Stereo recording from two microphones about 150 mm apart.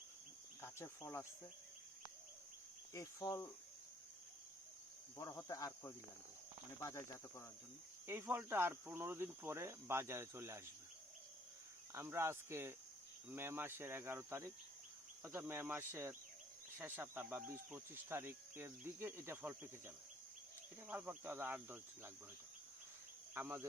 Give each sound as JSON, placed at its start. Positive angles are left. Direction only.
{"t": 0.6, "sound": "speech", "side_deg": 15}
{"t": 2.9, "sound": "speech", "side_deg": 25}
{"t": 5.1, "sound": "speech", "side_deg": 20}
{"t": 8.0, "sound": "speech", "side_deg": -15}
{"t": 11.9, "sound": "speech", "side_deg": -15}
{"t": 23.3, "sound": "speech", "side_deg": -15}